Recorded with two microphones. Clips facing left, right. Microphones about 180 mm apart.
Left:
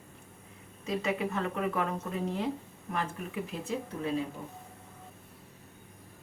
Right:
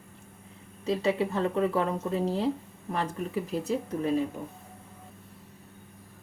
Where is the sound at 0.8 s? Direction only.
30° right (ahead or behind).